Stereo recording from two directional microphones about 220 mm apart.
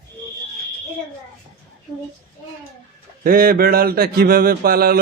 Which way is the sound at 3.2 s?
40° right (ahead or behind).